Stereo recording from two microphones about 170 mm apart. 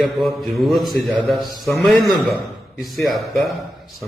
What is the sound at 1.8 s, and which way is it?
Speech, 5° left (ahead or behind).